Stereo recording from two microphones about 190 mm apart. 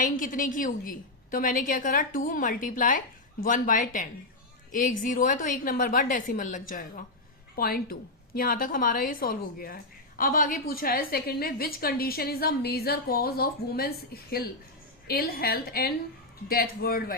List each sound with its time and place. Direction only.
0.0 s a woman's voice: 45° left (ahead or behind)